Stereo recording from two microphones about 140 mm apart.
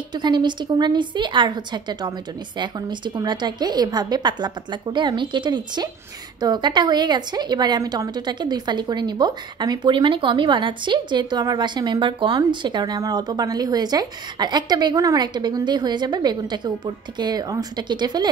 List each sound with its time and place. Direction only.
0.1 s a woman's voice: 30° right (ahead or behind)